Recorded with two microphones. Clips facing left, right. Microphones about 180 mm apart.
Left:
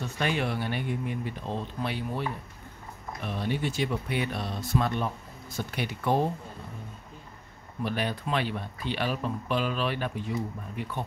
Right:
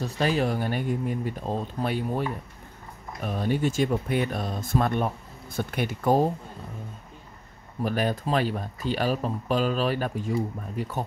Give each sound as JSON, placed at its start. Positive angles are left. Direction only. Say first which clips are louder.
{"t": 0.0, "sound": "speech", "louder": "right 4 dB", "side_deg": -35}
{"t": 7.8, "sound": "speech", "louder": "right 4 dB", "side_deg": -45}